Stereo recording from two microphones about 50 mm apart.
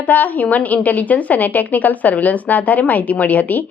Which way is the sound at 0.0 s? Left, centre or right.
Left.